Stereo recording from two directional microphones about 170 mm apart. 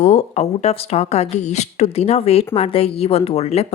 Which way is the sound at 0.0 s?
40° left (ahead or behind).